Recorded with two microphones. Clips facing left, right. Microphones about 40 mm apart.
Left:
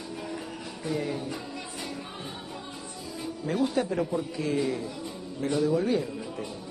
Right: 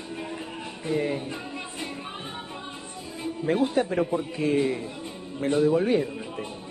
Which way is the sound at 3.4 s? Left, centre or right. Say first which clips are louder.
Right 3 dB; right.